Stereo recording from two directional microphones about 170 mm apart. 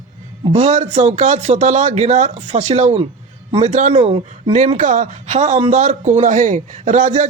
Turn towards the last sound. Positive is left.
turn(degrees=-45)  # may be behind; listen again after turning